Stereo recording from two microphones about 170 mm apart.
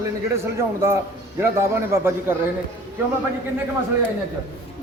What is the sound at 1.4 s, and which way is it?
Speech, 15° right (ahead or behind).